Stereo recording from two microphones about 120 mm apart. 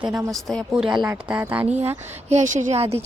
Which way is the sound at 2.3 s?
90° right.